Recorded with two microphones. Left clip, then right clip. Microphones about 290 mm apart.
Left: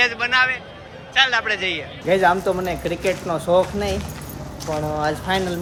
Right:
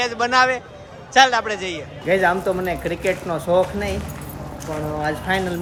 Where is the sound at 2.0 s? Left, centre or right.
Centre.